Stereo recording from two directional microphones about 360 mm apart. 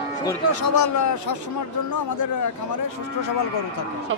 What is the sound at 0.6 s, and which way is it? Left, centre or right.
Speech, left.